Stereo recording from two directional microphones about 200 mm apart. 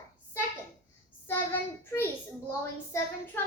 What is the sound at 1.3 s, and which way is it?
A child's voice, 10° left (ahead or behind).